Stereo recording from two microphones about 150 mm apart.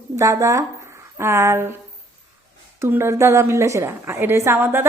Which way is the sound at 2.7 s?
15° right (ahead or behind).